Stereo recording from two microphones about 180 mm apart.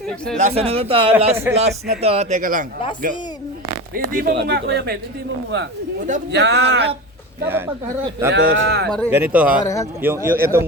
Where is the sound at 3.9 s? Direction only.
55° right (ahead or behind).